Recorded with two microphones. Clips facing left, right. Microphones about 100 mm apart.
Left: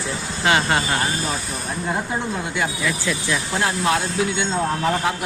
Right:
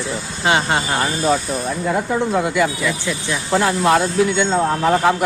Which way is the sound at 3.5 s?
75° right (ahead or behind).